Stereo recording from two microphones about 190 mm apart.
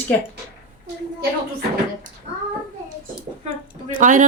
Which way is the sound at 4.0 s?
40° right (ahead or behind).